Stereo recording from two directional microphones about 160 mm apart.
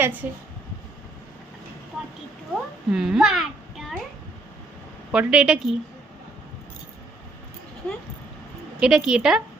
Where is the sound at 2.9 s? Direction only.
5° right (ahead or behind).